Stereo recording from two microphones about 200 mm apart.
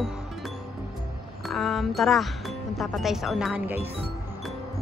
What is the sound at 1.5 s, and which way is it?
Speech, centre (ahead or behind).